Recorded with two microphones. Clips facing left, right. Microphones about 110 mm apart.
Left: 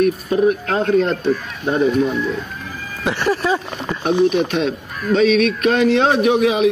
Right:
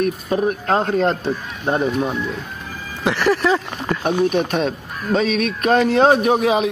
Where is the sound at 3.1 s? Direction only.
70° right (ahead or behind).